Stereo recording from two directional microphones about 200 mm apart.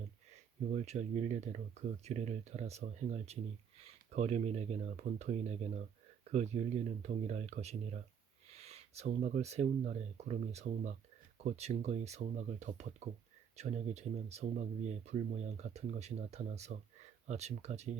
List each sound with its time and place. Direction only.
0.7 s speech: 35° right (ahead or behind)